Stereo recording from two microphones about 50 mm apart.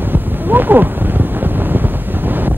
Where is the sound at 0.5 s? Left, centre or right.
Right.